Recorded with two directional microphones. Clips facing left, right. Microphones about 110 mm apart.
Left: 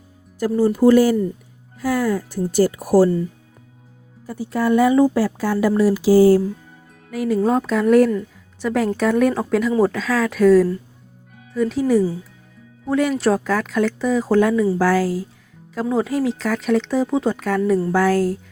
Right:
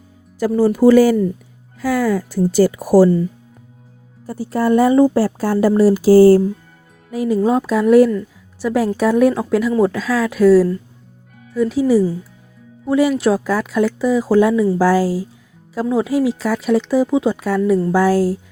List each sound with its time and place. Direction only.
0.3 s speech: 90° right
4.3 s a woman's voice: 40° right (ahead or behind)
7.1 s speech: 20° right (ahead or behind)
7.4 s speech: 5° right (ahead or behind)